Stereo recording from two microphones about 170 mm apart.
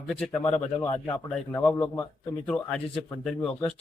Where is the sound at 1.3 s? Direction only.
10° left (ahead or behind).